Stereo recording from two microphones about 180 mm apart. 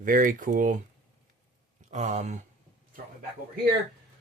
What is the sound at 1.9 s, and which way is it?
Speech, 40° right (ahead or behind).